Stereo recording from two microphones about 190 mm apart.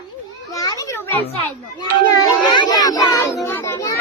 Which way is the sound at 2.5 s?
25° left (ahead or behind).